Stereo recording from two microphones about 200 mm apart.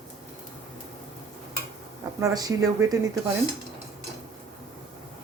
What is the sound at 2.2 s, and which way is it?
Speech, 15° right (ahead or behind).